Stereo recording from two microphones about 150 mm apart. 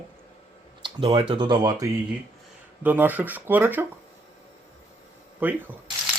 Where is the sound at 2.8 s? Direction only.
10° right (ahead or behind).